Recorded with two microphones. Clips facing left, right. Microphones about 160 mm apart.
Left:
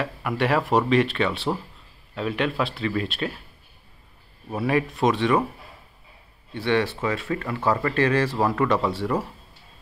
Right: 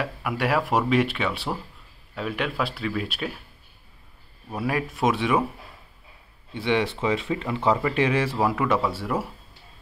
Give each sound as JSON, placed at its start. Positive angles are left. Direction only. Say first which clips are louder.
{"t": 0.0, "sound": "speech", "louder": "left 2 dB", "side_deg": -5}
{"t": 4.5, "sound": "speech", "louder": "left 4 dB", "side_deg": 0}
{"t": 6.5, "sound": "speech", "louder": "left 1 dB", "side_deg": -15}